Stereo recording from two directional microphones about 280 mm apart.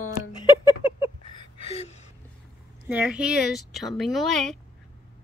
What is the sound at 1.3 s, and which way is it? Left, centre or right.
Gasp, left.